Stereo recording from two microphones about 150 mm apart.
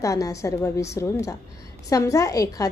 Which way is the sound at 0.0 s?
20° left (ahead or behind).